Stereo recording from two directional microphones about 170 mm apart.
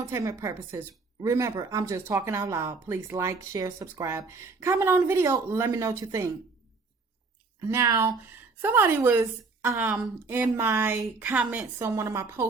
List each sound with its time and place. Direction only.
0.0 s speech: 20° right (ahead or behind)
7.7 s speech: 20° right (ahead or behind)